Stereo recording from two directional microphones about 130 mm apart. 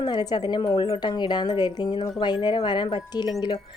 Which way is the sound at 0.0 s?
30° left (ahead or behind).